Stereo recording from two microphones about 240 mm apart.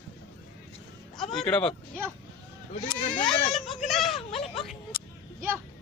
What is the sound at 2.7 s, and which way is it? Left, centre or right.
Speech, left.